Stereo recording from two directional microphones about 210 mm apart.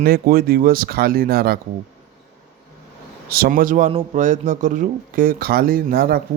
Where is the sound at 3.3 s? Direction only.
45° right (ahead or behind).